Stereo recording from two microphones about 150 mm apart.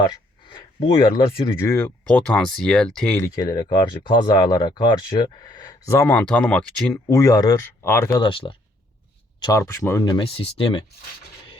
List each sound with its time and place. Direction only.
0.0 s a sound: 30° left (ahead or behind)
1.5 s speech: 20° left (ahead or behind)
3.2 s speech: 25° left (ahead or behind)
5.9 s speech: 15° left (ahead or behind)
7.1 s speech: 20° left (ahead or behind)
8.2 s speech: 35° left (ahead or behind)
9.4 s speech: 20° left (ahead or behind)
10.1 s speech: 35° left (ahead or behind)